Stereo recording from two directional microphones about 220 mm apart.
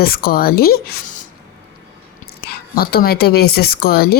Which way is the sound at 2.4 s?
45° left (ahead or behind).